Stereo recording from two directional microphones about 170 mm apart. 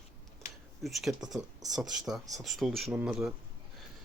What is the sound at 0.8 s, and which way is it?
Speech, centre (ahead or behind).